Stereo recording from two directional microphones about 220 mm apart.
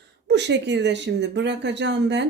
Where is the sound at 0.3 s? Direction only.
50° right (ahead or behind).